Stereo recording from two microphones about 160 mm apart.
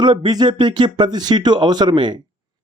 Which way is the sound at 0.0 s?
30° right (ahead or behind).